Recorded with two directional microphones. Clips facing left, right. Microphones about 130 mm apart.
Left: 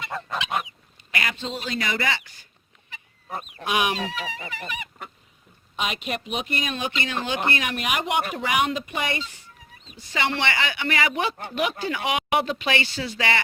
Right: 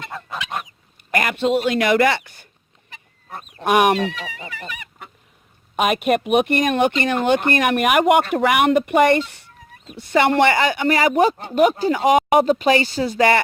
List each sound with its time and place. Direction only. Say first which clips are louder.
0.1 s goose: left 3 dB; centre (ahead or behind)
1.1 s speech: right 11 dB; 50° right (ahead or behind)
3.6 s speech: right 9 dB; 55° right (ahead or behind)
4.4 s goose: even; 20° left (ahead or behind)
5.7 s speech: right 11 dB; 55° right (ahead or behind)